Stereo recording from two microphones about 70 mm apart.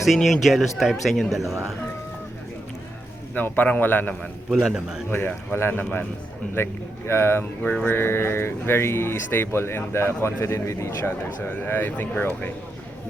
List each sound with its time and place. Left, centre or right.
0.0 s speech: centre
3.3 s speech: left
4.7 s a man's voice: centre
5.5 s speech: left
7.1 s speech: left
7.6 s speech: centre
7.9 s speech: left
11.6 s speech: left